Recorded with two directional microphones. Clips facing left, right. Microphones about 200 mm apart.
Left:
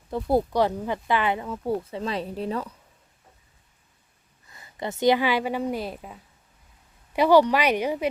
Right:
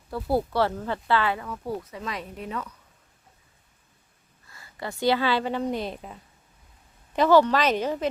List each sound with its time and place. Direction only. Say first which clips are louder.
0.1 s speech: left 3 dB; 20° left (ahead or behind)
4.4 s a woman's voice: left 3 dB; 20° left (ahead or behind)